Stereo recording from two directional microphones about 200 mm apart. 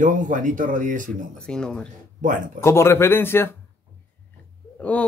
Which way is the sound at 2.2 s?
40° right (ahead or behind).